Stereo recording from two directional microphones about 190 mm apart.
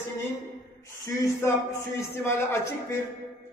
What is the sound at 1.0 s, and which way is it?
A man's voice, 15° left (ahead or behind).